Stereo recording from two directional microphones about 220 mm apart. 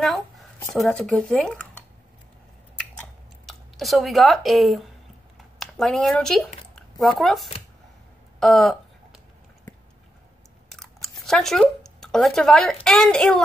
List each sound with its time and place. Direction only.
0.0 s speech: centre (ahead or behind)
3.0 s chewing: centre (ahead or behind)
5.6 s speech: centre (ahead or behind)
6.7 s squish: centre (ahead or behind)
8.4 s a sound: centre (ahead or behind)
10.7 s a sound: centre (ahead or behind)
12.8 s a woman's voice: centre (ahead or behind)